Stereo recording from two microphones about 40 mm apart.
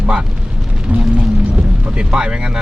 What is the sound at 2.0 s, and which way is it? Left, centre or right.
Speech, right.